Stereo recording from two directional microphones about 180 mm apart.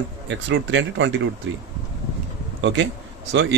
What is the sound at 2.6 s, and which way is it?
Speech, 90° right.